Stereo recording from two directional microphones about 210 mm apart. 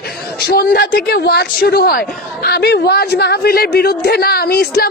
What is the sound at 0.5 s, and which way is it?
A woman's voice, 45° left (ahead or behind).